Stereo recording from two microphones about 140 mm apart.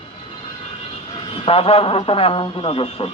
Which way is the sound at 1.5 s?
40° left (ahead or behind).